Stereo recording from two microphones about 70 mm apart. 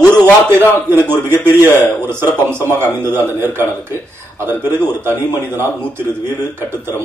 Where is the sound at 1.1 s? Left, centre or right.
Right.